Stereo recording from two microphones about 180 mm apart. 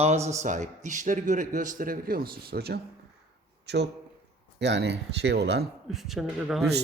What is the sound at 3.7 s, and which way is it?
Speech, 70° right (ahead or behind).